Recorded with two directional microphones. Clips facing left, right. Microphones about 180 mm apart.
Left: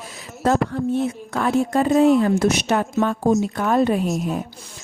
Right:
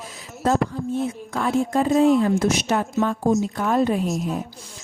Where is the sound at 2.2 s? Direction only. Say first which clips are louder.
Left 2 dB; 65° left (ahead or behind).